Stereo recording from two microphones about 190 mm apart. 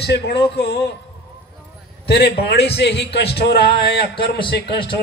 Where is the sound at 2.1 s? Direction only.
60° left (ahead or behind).